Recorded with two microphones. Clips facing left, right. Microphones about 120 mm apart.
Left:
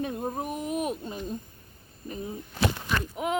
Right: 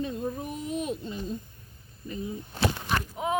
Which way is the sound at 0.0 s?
60° left (ahead or behind).